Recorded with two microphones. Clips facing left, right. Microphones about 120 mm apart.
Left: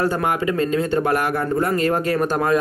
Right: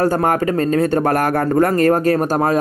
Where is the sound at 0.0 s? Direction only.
45° right (ahead or behind).